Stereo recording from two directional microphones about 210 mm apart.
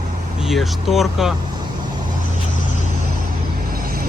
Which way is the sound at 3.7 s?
45° right (ahead or behind).